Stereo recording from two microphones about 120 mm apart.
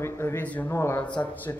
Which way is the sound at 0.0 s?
20° left (ahead or behind).